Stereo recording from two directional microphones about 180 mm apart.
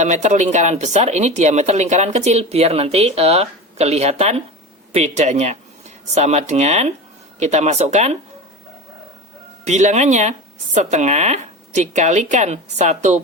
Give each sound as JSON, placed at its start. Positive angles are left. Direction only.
{"t": 0.0, "sound": "speech", "side_deg": -40}
{"t": 9.6, "sound": "speech", "side_deg": -40}